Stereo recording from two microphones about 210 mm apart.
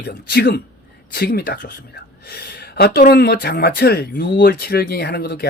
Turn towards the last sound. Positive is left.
turn(degrees=50)  # may be behind; listen again after turning